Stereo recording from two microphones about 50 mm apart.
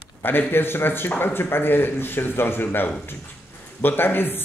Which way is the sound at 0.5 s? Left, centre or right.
Left.